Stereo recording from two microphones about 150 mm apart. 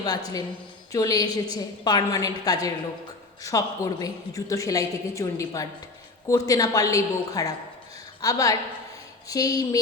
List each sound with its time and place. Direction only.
0.0 s a woman's voice: 25° left (ahead or behind)